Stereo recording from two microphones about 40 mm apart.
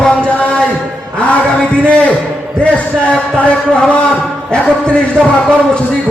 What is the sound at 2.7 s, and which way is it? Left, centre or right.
A man's voice, left.